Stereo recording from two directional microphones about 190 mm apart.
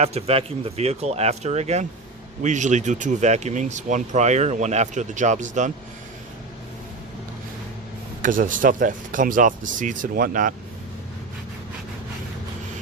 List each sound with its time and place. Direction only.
0.0 s speech: 35° right (ahead or behind)
8.2 s speech: 45° right (ahead or behind)